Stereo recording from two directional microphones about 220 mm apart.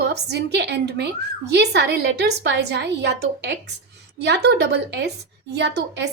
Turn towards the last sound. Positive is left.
turn(degrees=-50)  # may be behind; listen again after turning